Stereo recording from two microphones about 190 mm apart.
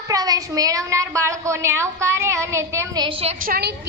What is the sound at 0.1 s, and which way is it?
A woman's voice, 20° right (ahead or behind).